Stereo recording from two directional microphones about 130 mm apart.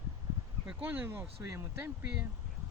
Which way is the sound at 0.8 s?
15° right (ahead or behind).